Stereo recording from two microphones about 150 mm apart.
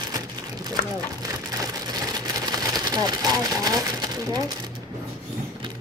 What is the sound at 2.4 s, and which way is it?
Speech, 25° right (ahead or behind).